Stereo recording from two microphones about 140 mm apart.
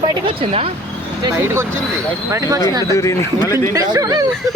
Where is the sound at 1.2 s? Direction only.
20° right (ahead or behind).